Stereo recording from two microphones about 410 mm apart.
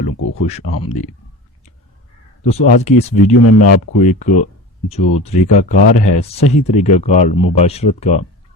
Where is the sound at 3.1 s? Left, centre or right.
Left.